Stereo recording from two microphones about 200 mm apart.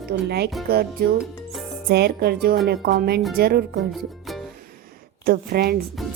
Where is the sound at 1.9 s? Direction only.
55° right (ahead or behind).